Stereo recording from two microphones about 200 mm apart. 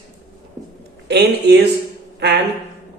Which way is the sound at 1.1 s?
55° right (ahead or behind).